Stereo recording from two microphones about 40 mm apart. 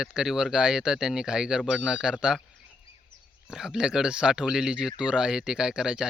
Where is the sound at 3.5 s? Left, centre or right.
Centre.